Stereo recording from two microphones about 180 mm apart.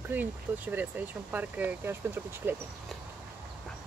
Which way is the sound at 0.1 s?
10° right (ahead or behind).